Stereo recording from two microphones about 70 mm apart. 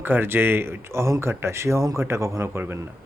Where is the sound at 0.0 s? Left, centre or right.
Right.